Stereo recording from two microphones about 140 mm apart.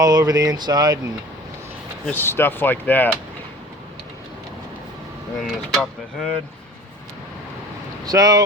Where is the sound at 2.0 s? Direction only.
15° left (ahead or behind).